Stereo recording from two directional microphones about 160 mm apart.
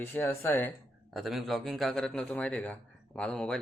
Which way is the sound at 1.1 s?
Centre (ahead or behind).